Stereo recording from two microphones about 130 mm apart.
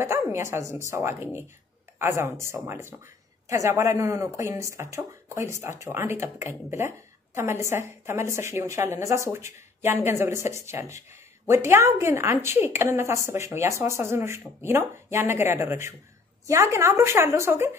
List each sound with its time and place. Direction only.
0.0 s a woman's voice: 20° right (ahead or behind)